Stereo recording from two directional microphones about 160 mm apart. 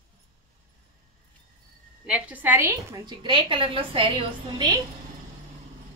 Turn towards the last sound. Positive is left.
turn(degrees=-30)  # may be behind; listen again after turning